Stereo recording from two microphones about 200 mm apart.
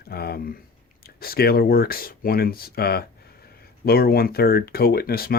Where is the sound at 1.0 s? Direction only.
50° left (ahead or behind).